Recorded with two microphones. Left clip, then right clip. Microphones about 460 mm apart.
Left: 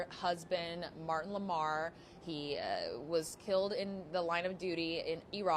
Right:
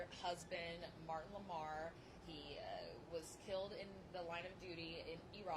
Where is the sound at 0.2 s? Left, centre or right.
Left.